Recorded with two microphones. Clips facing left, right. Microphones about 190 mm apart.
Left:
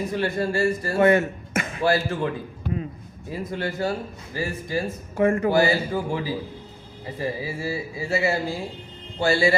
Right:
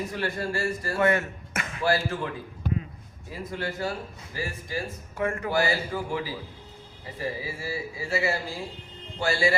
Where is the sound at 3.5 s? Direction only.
25° left (ahead or behind).